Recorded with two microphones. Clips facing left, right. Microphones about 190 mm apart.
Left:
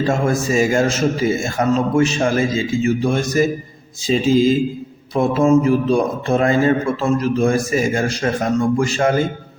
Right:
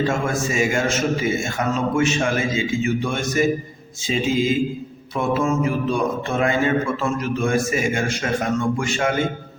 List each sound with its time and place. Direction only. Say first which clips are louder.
0.0 s a man's voice: left 4 dB; 35° left (ahead or behind)